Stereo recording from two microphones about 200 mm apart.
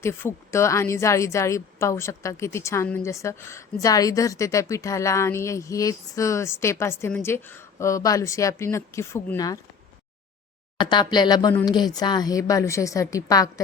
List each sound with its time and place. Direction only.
0.0 s a woman's voice: 15° left (ahead or behind)
10.8 s a woman's voice: 20° left (ahead or behind)